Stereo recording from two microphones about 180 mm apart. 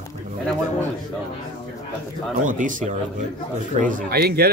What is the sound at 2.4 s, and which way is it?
Speech, 45° right (ahead or behind).